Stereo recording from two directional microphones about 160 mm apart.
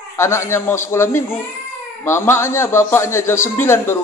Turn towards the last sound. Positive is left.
turn(degrees=15)  # may be behind; listen again after turning